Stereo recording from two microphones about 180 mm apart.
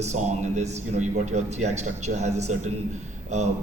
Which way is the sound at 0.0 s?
40° right (ahead or behind).